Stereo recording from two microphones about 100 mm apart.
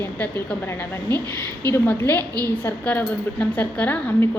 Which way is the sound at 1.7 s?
25° left (ahead or behind).